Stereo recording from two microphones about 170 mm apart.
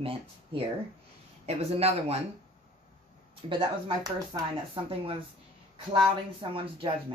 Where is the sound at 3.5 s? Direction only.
25° right (ahead or behind).